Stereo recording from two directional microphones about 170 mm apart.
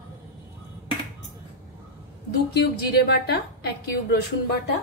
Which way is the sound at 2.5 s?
70° left (ahead or behind).